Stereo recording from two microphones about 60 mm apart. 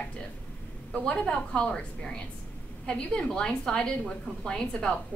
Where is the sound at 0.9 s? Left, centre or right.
Centre.